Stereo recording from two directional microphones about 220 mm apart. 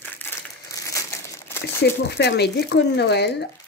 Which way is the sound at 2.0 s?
50° left (ahead or behind).